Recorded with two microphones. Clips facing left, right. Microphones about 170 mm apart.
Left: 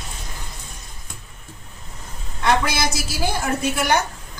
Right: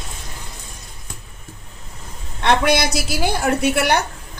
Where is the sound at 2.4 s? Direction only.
65° right (ahead or behind).